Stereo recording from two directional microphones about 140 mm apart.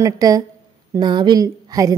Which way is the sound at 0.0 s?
25° right (ahead or behind).